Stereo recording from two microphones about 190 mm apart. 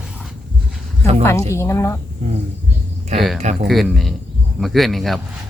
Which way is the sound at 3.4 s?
40° right (ahead or behind).